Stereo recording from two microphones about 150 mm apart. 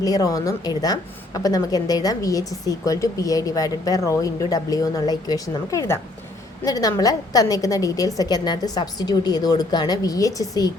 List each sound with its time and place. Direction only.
0.0 s a woman's voice: 25° left (ahead or behind)